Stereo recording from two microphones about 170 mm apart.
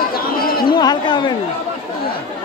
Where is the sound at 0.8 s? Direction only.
25° left (ahead or behind).